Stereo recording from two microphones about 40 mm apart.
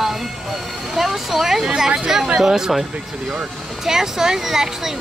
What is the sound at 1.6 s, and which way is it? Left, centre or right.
Speech, centre.